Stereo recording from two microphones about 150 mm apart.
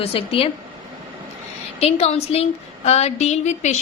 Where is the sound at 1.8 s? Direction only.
45° left (ahead or behind).